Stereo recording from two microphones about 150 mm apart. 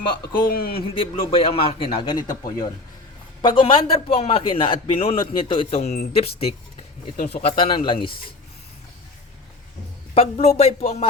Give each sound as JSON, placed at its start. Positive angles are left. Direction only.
{"t": 0.4, "sound": "speech", "side_deg": 85}
{"t": 0.9, "sound": "a man's voice", "side_deg": 40}
{"t": 10.2, "sound": "speech", "side_deg": 45}